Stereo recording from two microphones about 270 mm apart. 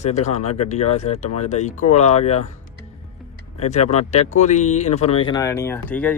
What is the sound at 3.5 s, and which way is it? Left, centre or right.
Speech, left.